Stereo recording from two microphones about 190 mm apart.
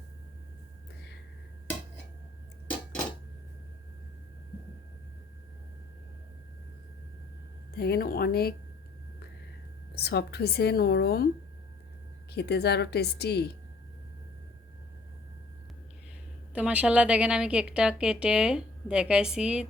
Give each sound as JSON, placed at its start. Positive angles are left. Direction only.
{"t": 7.8, "sound": "speech", "side_deg": 55}
{"t": 9.9, "sound": "speech", "side_deg": 60}
{"t": 12.3, "sound": "speech", "side_deg": 60}
{"t": 16.6, "sound": "a woman's voice", "side_deg": -5}